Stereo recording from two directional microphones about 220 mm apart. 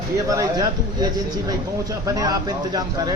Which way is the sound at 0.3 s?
15° right (ahead or behind).